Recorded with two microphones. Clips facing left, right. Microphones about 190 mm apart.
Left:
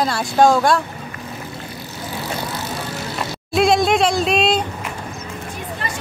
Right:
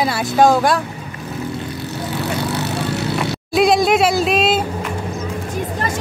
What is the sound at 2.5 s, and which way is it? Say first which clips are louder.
Vehicle: right 6 dB; 70° right (ahead or behind).